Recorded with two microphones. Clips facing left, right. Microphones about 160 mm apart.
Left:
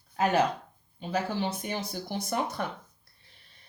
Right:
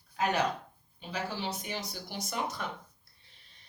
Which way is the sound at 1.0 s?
50° left (ahead or behind).